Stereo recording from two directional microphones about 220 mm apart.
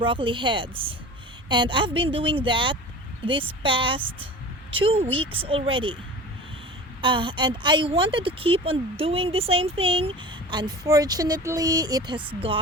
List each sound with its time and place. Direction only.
0.0 s a woman's voice: 20° right (ahead or behind)
7.0 s a woman's voice: 25° right (ahead or behind)